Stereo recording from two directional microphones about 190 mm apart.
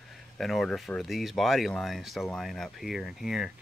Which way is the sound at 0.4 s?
Centre (ahead or behind).